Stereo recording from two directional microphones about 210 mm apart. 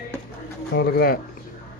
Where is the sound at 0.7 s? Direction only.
50° left (ahead or behind).